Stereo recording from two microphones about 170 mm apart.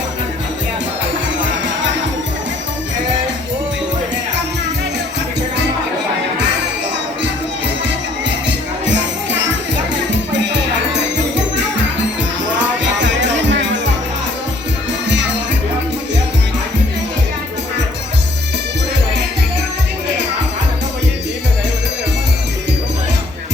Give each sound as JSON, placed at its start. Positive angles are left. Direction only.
{"t": 8.4, "sound": "music", "side_deg": -90}
{"t": 13.0, "sound": "music", "side_deg": -90}